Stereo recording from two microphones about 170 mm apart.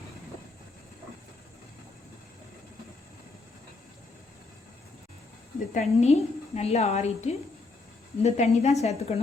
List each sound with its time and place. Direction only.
5.7 s a woman's voice: 40° left (ahead or behind)